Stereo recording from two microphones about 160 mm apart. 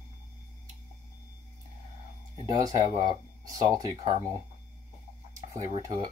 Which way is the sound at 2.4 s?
25° right (ahead or behind).